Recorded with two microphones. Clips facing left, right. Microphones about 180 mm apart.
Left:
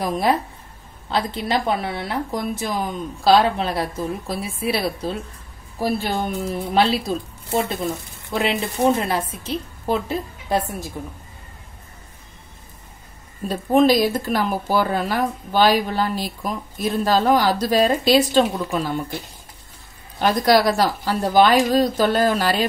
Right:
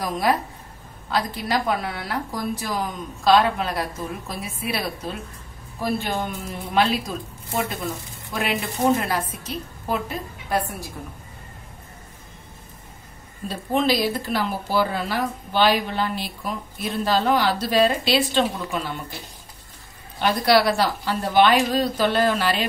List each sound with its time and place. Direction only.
0.0 s a woman's voice: 25° left (ahead or behind)
13.5 s speech: 45° left (ahead or behind)
20.2 s a woman's voice: 40° left (ahead or behind)